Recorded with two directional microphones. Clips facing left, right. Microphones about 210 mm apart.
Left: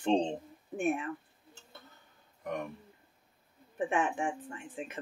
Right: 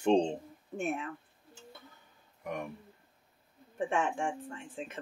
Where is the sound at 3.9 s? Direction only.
15° left (ahead or behind).